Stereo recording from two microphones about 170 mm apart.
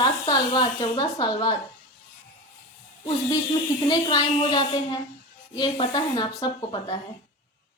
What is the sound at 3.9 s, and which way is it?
Speech, 25° left (ahead or behind).